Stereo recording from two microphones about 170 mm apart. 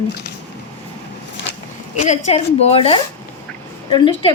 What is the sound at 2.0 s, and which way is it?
A woman's voice, 40° left (ahead or behind).